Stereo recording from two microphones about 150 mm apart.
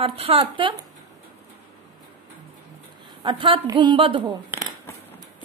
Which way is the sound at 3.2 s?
35° right (ahead or behind).